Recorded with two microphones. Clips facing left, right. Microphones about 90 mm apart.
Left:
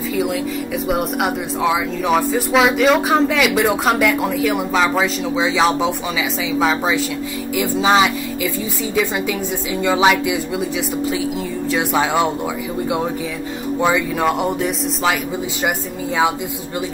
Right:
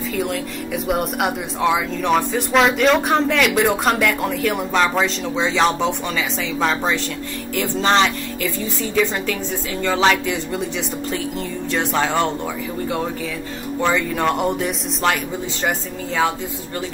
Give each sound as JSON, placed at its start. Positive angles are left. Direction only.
{"t": 0.8, "sound": "speech", "side_deg": 0}
{"t": 7.5, "sound": "speech", "side_deg": 5}
{"t": 9.8, "sound": "speech", "side_deg": 10}
{"t": 11.7, "sound": "speech", "side_deg": 10}
{"t": 13.7, "sound": "speech", "side_deg": 10}